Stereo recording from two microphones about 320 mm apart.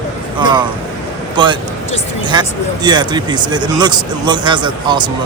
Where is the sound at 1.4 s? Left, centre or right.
Centre.